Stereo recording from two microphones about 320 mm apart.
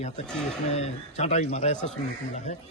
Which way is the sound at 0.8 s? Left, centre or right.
Centre.